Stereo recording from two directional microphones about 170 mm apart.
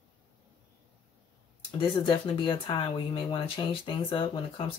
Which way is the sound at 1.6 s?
30° left (ahead or behind).